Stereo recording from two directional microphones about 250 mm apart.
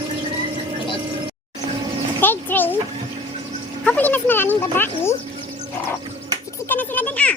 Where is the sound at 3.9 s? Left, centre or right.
Centre.